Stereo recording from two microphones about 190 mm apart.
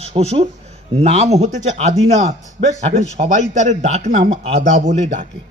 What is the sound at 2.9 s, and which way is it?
Speech, 20° left (ahead or behind).